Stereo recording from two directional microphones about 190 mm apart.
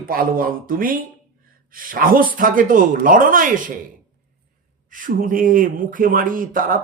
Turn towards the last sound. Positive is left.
turn(degrees=-45)  # may be behind; listen again after turning